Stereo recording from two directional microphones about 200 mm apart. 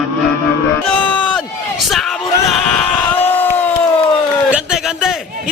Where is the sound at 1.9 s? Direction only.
Centre (ahead or behind).